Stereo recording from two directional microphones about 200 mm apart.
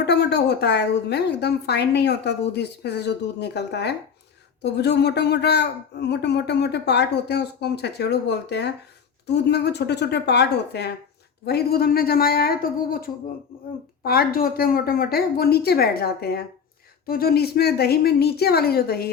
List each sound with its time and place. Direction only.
0.0 s a woman's voice: 55° left (ahead or behind)